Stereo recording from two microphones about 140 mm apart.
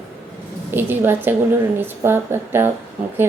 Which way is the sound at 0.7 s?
15° right (ahead or behind).